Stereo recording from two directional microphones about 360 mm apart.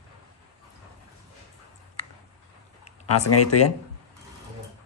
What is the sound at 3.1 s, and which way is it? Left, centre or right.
Speech, left.